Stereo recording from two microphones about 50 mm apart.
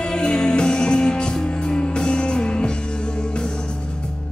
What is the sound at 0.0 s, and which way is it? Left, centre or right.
Music, centre.